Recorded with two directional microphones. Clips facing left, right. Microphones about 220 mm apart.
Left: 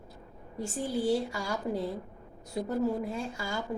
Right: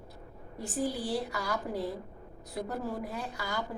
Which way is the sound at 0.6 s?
25° left (ahead or behind).